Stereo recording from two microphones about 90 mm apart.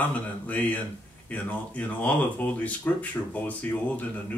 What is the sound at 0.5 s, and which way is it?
Speech, 15° left (ahead or behind).